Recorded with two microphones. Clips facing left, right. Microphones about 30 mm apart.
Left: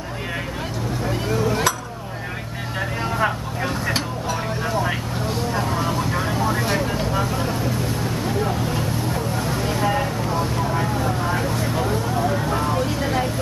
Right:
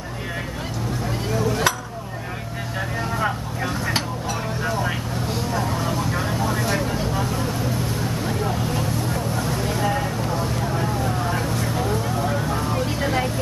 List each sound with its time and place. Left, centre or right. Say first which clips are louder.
1.0 s a sound: left 2 dB; centre
3.3 s vehicle: left 1 dB; centre
12.8 s vehicle: left 1 dB; centre